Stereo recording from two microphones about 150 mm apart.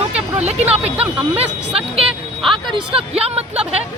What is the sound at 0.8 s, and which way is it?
A woman's voice, 10° right (ahead or behind).